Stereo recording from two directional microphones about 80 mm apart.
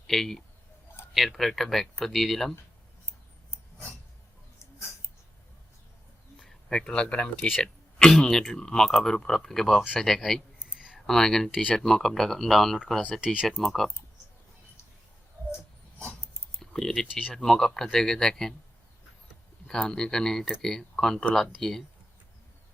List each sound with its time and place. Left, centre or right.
0.1 s speech: centre
4.6 s a sound: left
6.4 s speech: centre
7.5 s speech: centre
10.8 s a sound: centre
11.0 s speech: centre
13.2 s speech: centre
13.6 s speech: centre
16.6 s typing: centre
17.3 s speech: centre
19.6 s speech: centre